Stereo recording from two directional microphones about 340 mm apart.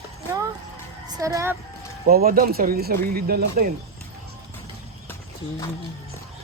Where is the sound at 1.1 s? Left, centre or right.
Centre.